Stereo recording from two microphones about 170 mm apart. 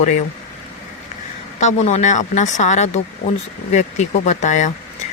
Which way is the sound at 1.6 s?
45° left (ahead or behind).